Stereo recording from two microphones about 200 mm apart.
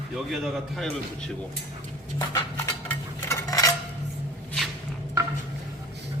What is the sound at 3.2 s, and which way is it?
Dishes, 15° left (ahead or behind).